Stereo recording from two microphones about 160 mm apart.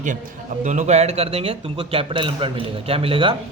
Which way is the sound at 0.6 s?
50° right (ahead or behind).